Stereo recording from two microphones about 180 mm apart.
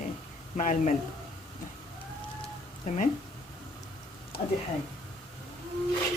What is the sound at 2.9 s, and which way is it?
Speech, 45° left (ahead or behind).